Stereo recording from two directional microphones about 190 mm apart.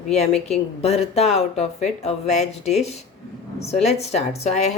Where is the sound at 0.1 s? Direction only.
35° left (ahead or behind).